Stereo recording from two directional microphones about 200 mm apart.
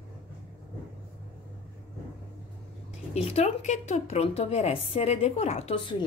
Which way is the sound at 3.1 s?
35° left (ahead or behind).